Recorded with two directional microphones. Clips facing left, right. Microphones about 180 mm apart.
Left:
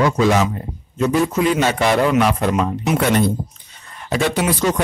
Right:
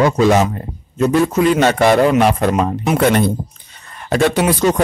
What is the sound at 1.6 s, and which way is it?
Speech, 55° right (ahead or behind).